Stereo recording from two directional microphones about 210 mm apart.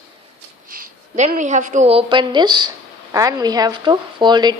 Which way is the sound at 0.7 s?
40° right (ahead or behind).